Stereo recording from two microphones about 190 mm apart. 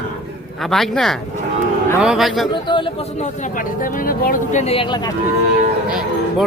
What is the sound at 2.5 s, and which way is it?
Speech, 25° left (ahead or behind).